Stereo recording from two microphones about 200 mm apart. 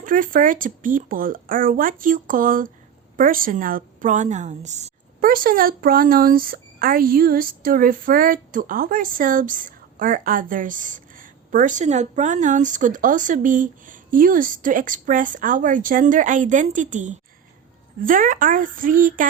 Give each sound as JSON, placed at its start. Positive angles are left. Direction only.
{"t": 0.0, "sound": "a woman's voice", "side_deg": -45}